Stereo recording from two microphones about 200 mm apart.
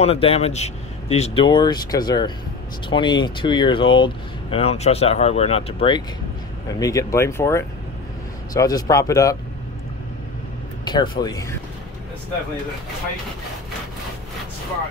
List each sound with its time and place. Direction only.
0.0 s speech: 30° left (ahead or behind)
10.9 s speech: 20° left (ahead or behind)